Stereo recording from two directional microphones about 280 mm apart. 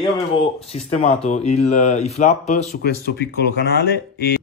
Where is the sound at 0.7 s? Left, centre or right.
Left.